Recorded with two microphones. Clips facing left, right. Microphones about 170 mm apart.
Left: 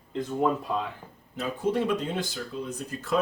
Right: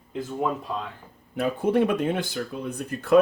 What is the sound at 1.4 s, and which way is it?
Speech, 60° right (ahead or behind).